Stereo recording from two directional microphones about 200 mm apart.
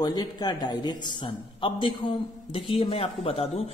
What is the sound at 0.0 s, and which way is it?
A man's voice, 20° left (ahead or behind).